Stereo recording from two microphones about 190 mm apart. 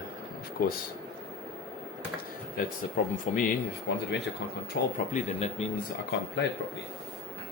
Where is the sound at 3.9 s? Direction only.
65° left (ahead or behind).